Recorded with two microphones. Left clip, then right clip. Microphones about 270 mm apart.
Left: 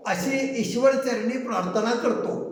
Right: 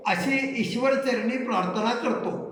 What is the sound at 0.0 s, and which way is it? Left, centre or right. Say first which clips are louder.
A man's voice: right 1 dB; centre.